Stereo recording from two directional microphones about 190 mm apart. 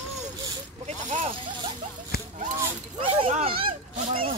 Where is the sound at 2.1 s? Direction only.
55° left (ahead or behind).